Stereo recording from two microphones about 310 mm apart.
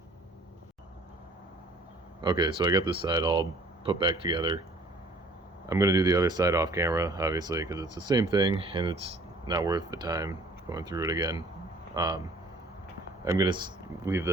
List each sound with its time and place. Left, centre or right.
2.2 s speech: centre
5.6 s speech: centre
13.2 s speech: centre